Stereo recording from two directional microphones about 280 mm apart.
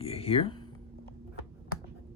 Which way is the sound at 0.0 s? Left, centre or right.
Left.